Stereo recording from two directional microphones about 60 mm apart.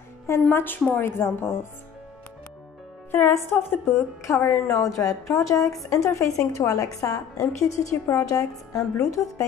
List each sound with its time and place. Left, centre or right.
0.3 s a woman's voice: left
3.1 s a woman's voice: left
7.9 s a woman's voice: left
8.3 s a woman's voice: left